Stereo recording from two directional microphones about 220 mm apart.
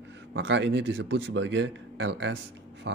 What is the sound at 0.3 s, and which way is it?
Speech, 55° right (ahead or behind).